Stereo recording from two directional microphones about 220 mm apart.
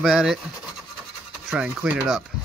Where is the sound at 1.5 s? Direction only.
5° right (ahead or behind).